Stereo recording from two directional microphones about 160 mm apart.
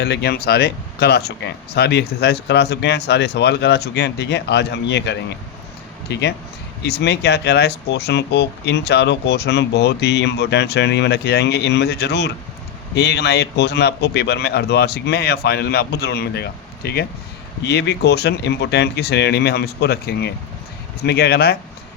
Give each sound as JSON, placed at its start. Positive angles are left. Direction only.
{"t": 0.0, "sound": "speech", "side_deg": 90}